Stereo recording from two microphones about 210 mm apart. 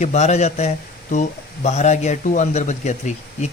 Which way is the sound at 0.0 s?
35° left (ahead or behind).